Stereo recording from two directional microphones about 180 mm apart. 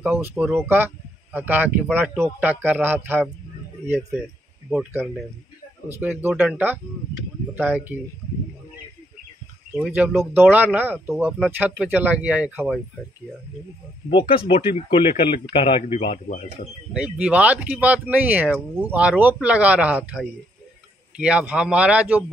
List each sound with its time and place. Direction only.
0.0 s speech: 10° right (ahead or behind)
4.9 s speech: centre (ahead or behind)
9.8 s speech: 5° right (ahead or behind)
14.1 s speech: 30° left (ahead or behind)
16.9 s speech: 5° right (ahead or behind)